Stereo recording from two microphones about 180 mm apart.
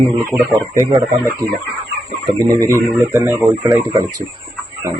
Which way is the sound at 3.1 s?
10° right (ahead or behind).